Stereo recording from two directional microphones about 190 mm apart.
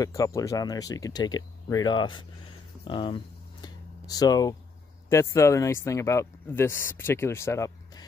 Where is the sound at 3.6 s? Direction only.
20° left (ahead or behind).